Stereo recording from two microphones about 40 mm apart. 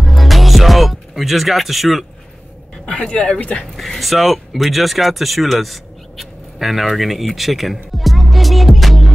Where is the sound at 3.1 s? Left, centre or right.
Centre.